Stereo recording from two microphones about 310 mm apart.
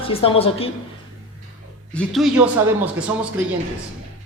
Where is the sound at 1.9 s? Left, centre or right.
Centre.